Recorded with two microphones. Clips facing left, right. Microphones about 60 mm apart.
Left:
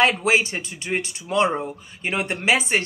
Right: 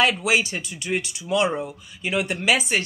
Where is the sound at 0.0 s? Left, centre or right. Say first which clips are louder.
Left 2 dB; left.